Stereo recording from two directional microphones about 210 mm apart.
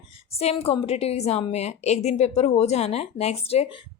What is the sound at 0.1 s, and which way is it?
A woman's voice, 30° left (ahead or behind).